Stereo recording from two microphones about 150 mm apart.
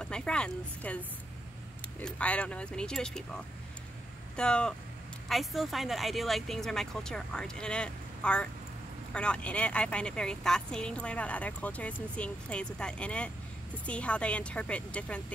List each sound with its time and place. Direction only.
0.0 s speech: 5° left (ahead or behind)
4.4 s speech: 5° left (ahead or behind)